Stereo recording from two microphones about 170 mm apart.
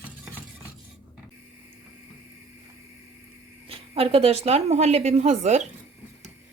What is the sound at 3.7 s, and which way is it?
A woman's voice, 35° right (ahead or behind).